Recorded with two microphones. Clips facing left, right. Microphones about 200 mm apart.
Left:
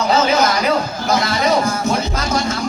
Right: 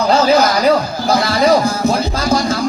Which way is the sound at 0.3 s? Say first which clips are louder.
Right 4 dB; 35° right (ahead or behind).